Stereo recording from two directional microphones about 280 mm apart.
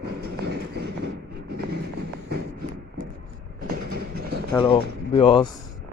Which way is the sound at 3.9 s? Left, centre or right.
Right.